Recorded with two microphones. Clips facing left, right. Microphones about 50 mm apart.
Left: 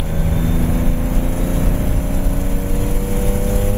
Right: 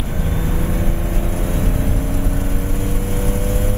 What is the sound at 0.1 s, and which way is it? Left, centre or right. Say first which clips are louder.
Vehicle: left 4 dB; right.